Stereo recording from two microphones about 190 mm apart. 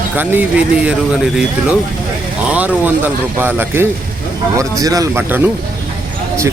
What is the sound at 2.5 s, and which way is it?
Speech, 5° right (ahead or behind).